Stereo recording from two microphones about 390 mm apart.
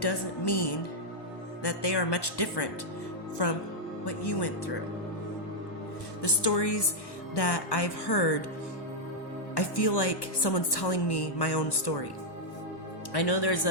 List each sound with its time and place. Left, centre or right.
0.0 s a woman's voice: left
1.6 s a woman's voice: left
4.0 s a woman's voice: left
6.2 s a woman's voice: left
9.6 s a woman's voice: left
13.1 s a man's voice: left